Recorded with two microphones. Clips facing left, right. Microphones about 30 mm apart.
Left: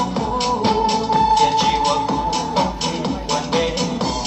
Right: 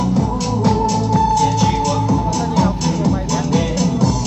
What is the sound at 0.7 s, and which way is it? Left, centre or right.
Music, left.